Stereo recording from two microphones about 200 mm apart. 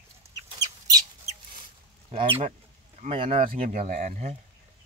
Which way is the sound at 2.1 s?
30° right (ahead or behind).